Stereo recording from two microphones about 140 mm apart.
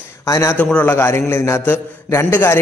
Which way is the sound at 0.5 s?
10° left (ahead or behind).